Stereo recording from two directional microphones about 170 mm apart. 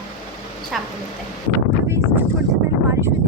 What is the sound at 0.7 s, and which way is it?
Speech, centre (ahead or behind).